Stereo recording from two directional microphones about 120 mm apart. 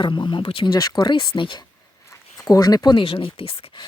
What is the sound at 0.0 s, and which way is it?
Speech, 40° left (ahead or behind).